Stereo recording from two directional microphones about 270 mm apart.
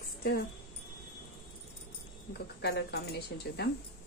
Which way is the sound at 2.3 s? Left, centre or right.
Left.